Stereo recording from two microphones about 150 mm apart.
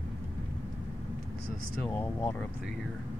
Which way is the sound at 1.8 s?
15° left (ahead or behind).